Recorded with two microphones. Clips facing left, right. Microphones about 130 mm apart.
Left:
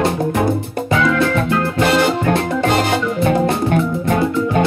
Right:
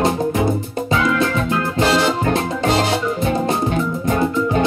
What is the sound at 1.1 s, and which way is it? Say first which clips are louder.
Music: left 2 dB; 50° left (ahead or behind).